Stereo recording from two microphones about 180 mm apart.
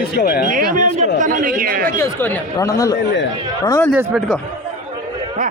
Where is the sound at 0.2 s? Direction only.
55° left (ahead or behind).